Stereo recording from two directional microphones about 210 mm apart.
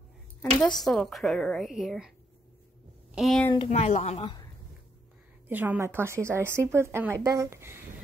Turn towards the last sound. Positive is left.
turn(degrees=-10)  # may be behind; listen again after turning